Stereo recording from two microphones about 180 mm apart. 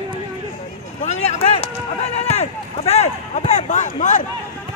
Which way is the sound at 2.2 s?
35° left (ahead or behind).